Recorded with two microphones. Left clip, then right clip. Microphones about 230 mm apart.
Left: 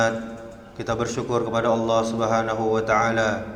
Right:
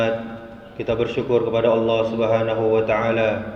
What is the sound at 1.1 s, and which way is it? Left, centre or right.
A man's voice, left.